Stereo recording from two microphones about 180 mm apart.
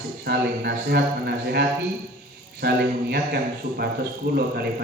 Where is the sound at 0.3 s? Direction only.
60° right (ahead or behind).